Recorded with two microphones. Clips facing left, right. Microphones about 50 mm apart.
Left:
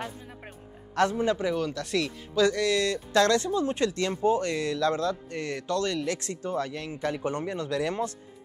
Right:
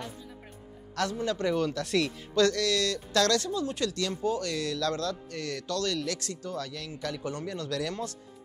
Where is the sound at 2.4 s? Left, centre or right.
Left.